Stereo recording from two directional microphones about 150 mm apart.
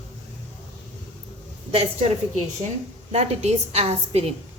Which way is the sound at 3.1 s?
45° right (ahead or behind).